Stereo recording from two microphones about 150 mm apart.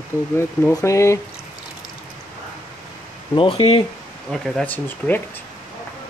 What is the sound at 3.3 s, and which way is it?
Speech, 35° left (ahead or behind).